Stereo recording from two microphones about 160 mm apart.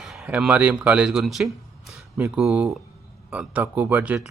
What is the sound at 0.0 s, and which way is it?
Speech, centre (ahead or behind).